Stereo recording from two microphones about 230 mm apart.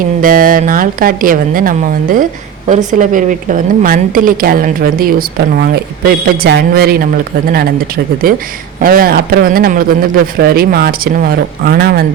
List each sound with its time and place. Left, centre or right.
0.2 s a woman's voice: right